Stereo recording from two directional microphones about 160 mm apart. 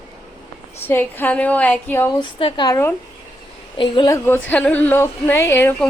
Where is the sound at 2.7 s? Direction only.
15° left (ahead or behind).